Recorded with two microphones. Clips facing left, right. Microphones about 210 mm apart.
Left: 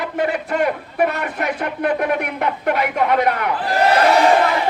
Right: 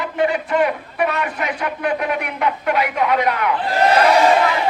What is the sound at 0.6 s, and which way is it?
Speech, 50° left (ahead or behind).